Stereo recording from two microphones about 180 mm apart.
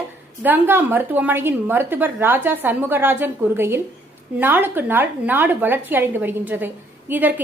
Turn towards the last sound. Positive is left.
turn(degrees=-10)  # may be behind; listen again after turning